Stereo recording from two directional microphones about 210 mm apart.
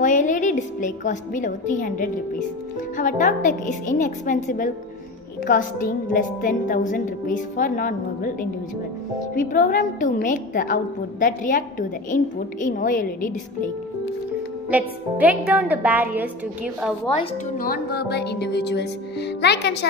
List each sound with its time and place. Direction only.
0.0 s a woman's voice: 40° left (ahead or behind)
14.7 s a woman's voice: 5° right (ahead or behind)
17.6 s music: 45° left (ahead or behind)